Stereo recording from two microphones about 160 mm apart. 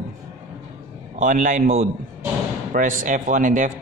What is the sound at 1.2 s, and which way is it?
A man's voice, 55° right (ahead or behind).